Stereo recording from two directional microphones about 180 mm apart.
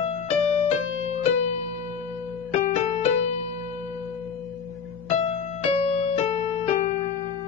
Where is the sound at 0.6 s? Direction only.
35° left (ahead or behind).